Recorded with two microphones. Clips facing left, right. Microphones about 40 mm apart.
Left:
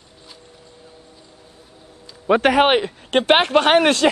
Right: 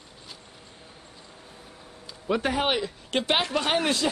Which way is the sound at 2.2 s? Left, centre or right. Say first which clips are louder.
Left 10 dB; left.